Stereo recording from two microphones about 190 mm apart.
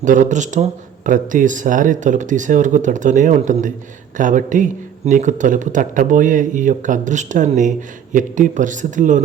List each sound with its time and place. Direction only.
0.0 s a man's voice: 40° right (ahead or behind)